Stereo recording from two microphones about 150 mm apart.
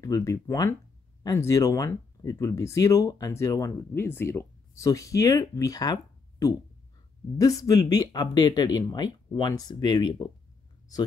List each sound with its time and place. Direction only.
0.0 s speech: 20° left (ahead or behind)
7.6 s speech: 25° left (ahead or behind)